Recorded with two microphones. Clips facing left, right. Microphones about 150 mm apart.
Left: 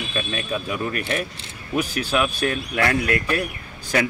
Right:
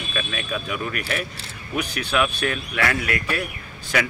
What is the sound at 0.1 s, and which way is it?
Speech, 30° left (ahead or behind).